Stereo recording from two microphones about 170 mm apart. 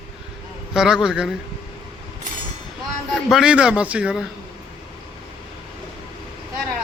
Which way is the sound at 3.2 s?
5° right (ahead or behind).